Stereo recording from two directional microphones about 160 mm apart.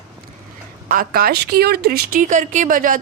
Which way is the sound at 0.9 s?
60° right (ahead or behind).